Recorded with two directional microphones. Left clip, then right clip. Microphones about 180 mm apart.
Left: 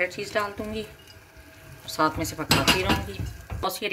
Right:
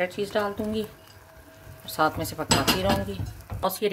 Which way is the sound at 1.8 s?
35° right (ahead or behind).